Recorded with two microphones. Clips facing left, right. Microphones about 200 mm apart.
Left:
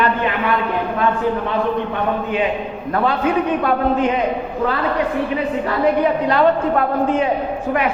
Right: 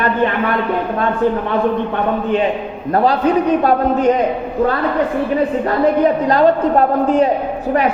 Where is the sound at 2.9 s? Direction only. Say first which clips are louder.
Right 4 dB; 35° right (ahead or behind).